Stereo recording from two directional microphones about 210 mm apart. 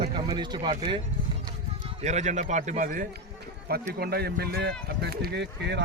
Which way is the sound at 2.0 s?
35° right (ahead or behind).